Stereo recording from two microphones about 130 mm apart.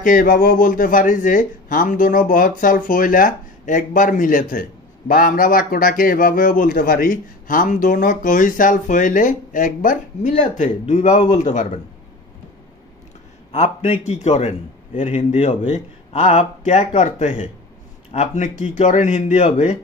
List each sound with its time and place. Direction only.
0.0 s speech: 90° left; by 11.8 s 65° left (ahead or behind)
13.5 s speech: 60° left (ahead or behind)